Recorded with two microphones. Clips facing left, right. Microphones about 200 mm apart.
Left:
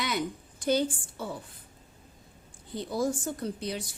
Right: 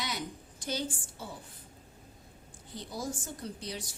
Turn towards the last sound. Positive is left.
turn(degrees=55)  # may be behind; listen again after turning